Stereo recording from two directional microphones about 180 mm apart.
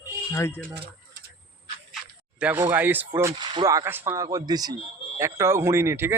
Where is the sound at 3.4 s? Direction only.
20° right (ahead or behind).